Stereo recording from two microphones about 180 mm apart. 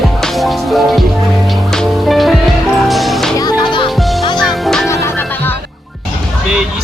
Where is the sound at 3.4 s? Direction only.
20° left (ahead or behind).